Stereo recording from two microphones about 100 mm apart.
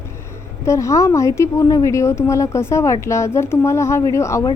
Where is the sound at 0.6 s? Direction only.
30° left (ahead or behind).